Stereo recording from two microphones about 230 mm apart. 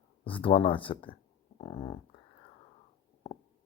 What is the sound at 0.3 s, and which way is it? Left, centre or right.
Speech, left.